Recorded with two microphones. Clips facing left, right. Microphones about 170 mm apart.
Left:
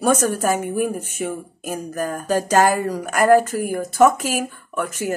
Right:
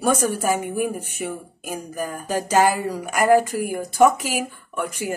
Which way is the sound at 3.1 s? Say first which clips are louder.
Left 2 dB; 50° left (ahead or behind).